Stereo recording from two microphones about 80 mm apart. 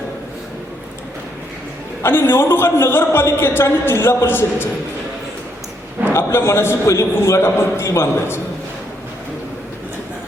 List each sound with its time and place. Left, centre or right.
2.0 s a man's voice: left
6.1 s a man's voice: left